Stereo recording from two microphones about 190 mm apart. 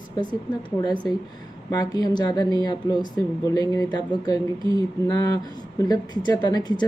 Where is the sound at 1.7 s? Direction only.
20° left (ahead or behind).